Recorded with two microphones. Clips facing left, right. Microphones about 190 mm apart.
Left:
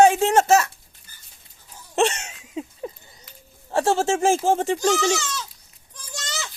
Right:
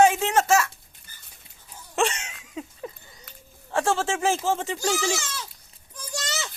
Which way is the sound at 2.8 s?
30° left (ahead or behind).